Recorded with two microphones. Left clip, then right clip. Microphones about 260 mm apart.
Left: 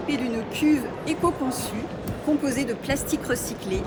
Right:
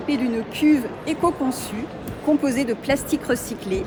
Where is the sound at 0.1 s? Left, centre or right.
Right.